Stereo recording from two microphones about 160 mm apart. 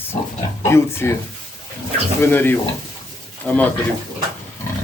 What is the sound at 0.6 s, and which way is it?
Speech, 15° left (ahead or behind).